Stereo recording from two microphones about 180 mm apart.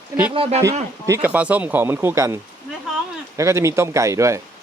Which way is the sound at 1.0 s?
15° right (ahead or behind).